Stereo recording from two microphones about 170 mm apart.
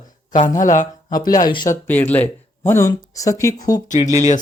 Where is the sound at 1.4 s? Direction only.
25° left (ahead or behind).